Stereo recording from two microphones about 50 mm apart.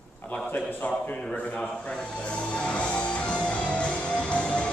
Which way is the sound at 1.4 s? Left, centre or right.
Left.